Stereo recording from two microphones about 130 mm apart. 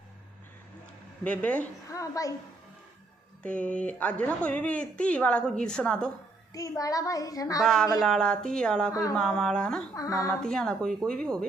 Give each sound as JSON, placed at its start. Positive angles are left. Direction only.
{"t": 1.2, "sound": "a woman's voice", "side_deg": 10}
{"t": 1.9, "sound": "a child's voice", "side_deg": 25}
{"t": 3.4, "sound": "a woman's voice", "side_deg": 10}
{"t": 6.5, "sound": "a child's voice", "side_deg": 25}
{"t": 7.6, "sound": "speech", "side_deg": 5}
{"t": 8.9, "sound": "a child's voice", "side_deg": 25}
{"t": 9.1, "sound": "speech", "side_deg": 5}
{"t": 9.9, "sound": "a child's voice", "side_deg": 25}
{"t": 10.4, "sound": "a woman's voice", "side_deg": 5}